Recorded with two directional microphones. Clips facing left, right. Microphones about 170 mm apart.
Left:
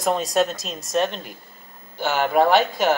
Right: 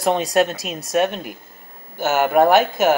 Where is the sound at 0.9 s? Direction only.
10° right (ahead or behind).